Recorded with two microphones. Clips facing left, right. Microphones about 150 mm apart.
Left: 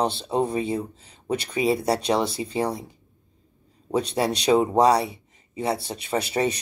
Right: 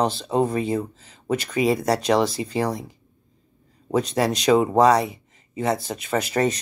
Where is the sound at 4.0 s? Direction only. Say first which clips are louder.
Right 2 dB; 30° left (ahead or behind).